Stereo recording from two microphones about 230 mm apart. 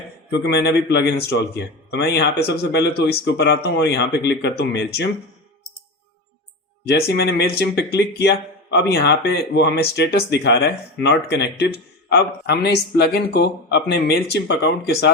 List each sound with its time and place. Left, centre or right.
0.3 s speech: left
6.8 s speech: left